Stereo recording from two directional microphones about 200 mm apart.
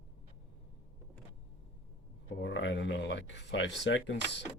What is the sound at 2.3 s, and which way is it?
Speech, 65° left (ahead or behind).